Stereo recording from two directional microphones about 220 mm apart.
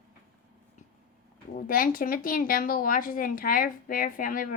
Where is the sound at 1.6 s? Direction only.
40° left (ahead or behind).